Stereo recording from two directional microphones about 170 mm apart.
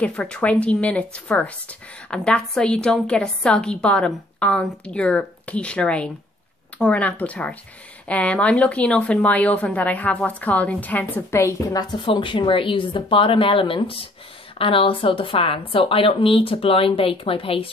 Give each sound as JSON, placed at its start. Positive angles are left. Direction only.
{"t": 0.0, "sound": "a woman's voice", "side_deg": 5}